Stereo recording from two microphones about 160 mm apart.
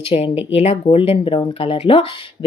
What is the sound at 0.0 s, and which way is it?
Speech, 35° left (ahead or behind).